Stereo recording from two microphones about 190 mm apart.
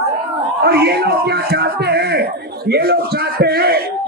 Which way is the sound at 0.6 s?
60° right (ahead or behind).